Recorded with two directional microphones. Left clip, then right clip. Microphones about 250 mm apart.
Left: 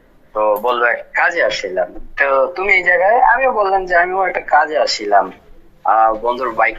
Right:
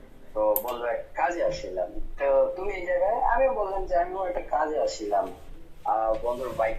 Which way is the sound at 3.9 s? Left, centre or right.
Left.